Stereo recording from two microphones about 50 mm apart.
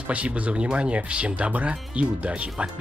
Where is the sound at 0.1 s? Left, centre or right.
Right.